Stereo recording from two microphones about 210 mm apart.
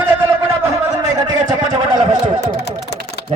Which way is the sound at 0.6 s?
15° right (ahead or behind).